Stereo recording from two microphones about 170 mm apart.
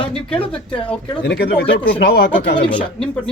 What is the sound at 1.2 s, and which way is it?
Speech, 75° left (ahead or behind).